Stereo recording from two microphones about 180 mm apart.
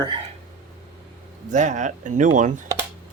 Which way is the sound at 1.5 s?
45° right (ahead or behind).